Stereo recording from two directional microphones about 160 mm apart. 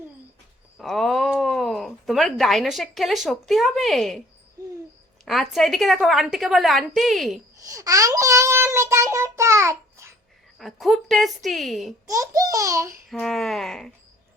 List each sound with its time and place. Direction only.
0.8 s speech: centre (ahead or behind)
5.2 s a woman's voice: centre (ahead or behind)
7.7 s a child's voice: 20° right (ahead or behind)
10.6 s a woman's voice: centre (ahead or behind)
12.0 s a child's voice: 20° right (ahead or behind)
13.1 s a woman's voice: centre (ahead or behind)